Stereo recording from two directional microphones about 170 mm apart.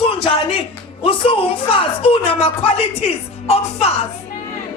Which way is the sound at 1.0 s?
35° left (ahead or behind).